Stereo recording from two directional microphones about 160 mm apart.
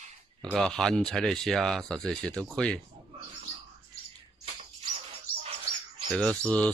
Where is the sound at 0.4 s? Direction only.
5° left (ahead or behind).